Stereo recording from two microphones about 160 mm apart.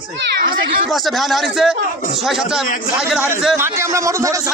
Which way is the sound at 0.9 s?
Centre (ahead or behind).